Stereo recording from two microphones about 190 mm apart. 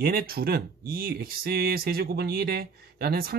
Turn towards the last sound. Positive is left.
turn(degrees=-55)  # may be behind; listen again after turning